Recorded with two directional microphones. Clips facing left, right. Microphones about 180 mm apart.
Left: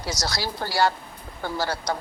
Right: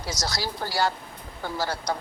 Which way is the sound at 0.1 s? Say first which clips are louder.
Left 1 dB; 70° left (ahead or behind).